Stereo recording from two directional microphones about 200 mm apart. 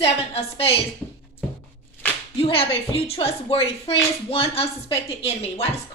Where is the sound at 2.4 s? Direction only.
30° left (ahead or behind).